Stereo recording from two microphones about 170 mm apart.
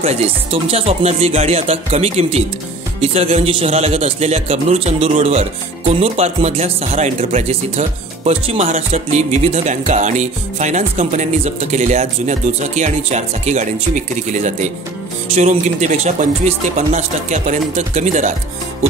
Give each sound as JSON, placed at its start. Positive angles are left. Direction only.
{"t": 0.0, "sound": "a man's voice", "side_deg": -35}
{"t": 8.7, "sound": "music", "side_deg": -40}